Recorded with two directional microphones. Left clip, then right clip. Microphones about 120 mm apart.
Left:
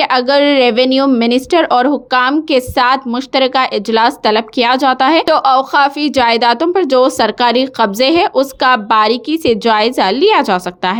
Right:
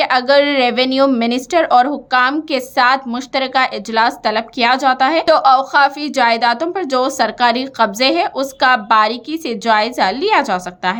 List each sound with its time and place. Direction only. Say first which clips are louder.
0.0 s a woman's voice: left 1 dB; 35° left (ahead or behind)